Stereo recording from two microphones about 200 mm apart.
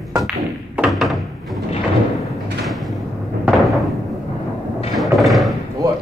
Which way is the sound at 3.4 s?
Centre (ahead or behind).